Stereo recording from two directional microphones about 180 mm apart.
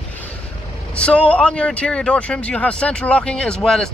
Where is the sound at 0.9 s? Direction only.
5° left (ahead or behind).